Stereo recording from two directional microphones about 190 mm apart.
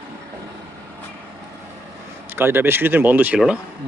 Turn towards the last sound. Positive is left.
turn(degrees=-5)  # may be behind; listen again after turning